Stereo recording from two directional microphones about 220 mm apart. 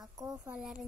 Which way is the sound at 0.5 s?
5° right (ahead or behind).